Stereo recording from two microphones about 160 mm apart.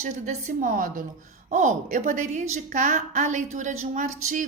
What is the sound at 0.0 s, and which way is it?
A woman's voice, 50° right (ahead or behind).